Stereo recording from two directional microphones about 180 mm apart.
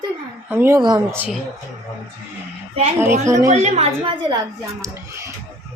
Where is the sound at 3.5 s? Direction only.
35° right (ahead or behind); by 5.3 s 15° right (ahead or behind).